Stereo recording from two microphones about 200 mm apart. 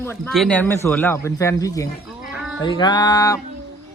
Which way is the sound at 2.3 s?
5° right (ahead or behind).